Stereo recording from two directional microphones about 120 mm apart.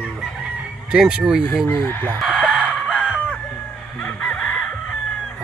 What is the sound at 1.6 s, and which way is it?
Chicken, 15° left (ahead or behind).